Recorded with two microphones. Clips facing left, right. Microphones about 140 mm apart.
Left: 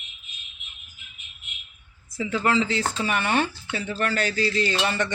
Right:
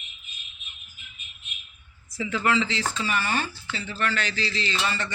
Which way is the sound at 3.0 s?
55° left (ahead or behind).